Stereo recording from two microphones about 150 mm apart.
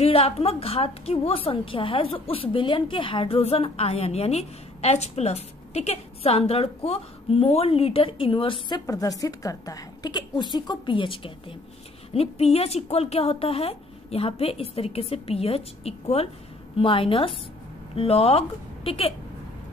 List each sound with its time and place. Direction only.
0.0 s a woman's voice: 40° left (ahead or behind)